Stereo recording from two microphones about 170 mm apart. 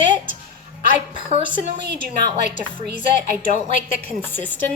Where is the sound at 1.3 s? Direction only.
35° right (ahead or behind).